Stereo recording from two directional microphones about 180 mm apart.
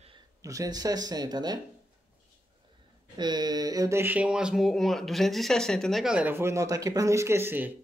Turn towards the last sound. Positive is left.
turn(degrees=-10)  # may be behind; listen again after turning